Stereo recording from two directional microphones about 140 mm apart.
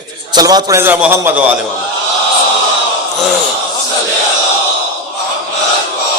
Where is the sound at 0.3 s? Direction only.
25° right (ahead or behind).